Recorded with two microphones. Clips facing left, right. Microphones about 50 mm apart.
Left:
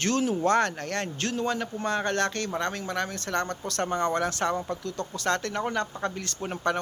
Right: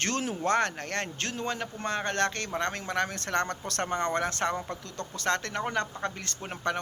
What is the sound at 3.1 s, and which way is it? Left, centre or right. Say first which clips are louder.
Speech: even; right.